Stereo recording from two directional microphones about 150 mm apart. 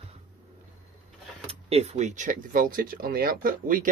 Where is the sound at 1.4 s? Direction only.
45° right (ahead or behind); by 3.8 s 70° right (ahead or behind).